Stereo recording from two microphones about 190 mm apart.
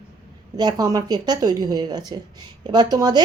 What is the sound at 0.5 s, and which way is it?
A woman's voice, 20° right (ahead or behind).